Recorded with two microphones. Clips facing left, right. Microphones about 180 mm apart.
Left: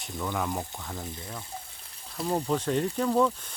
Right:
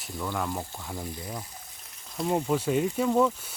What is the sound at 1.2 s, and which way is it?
Speech, 25° right (ahead or behind).